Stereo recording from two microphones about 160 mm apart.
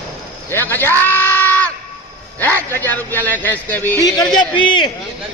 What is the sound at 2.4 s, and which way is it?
A man's voice, 10° left (ahead or behind).